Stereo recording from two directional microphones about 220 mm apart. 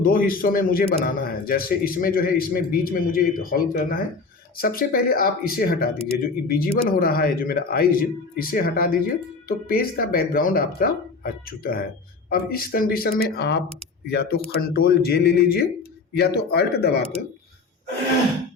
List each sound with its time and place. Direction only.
0.0 s speech: 40° left (ahead or behind)